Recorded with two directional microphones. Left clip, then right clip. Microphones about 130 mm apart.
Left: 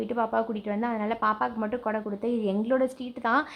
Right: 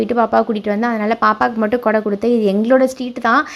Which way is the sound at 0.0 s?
25° right (ahead or behind).